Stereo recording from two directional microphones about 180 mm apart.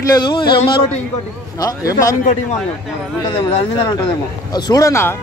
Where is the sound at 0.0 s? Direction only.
20° left (ahead or behind).